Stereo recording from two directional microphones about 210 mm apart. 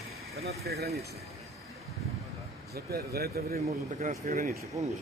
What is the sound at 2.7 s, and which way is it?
Speech, 50° right (ahead or behind).